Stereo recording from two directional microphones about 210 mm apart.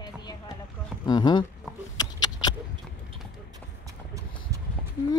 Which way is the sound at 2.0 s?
20° left (ahead or behind).